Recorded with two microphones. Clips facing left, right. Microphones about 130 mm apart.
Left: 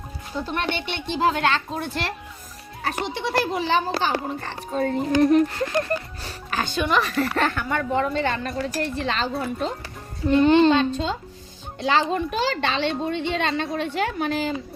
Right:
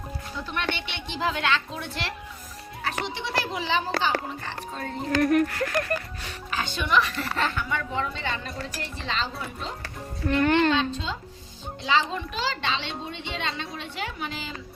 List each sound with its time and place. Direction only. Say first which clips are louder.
0.3 s a woman's voice: left 5 dB; 35° left (ahead or behind)
3.2 s a woman's voice: left 6 dB; 50° left (ahead or behind)
5.1 s speech: left 3 dB; 20° left (ahead or behind)
6.5 s music: left 5 dB; 45° left (ahead or behind)
6.9 s speech: left 1 dB; 40° left (ahead or behind)
7.3 s a woman's voice: left 4 dB; 50° left (ahead or behind)
10.2 s speech: left 6 dB; 20° left (ahead or behind)
10.8 s a woman's voice: left 5 dB; 50° left (ahead or behind)